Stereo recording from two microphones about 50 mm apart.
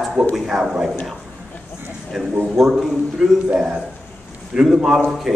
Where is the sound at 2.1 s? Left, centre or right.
Centre.